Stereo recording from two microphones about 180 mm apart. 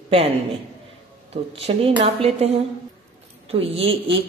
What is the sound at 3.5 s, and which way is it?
Speech, 30° right (ahead or behind).